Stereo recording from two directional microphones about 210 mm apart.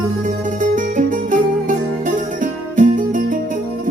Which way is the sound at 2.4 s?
40° right (ahead or behind).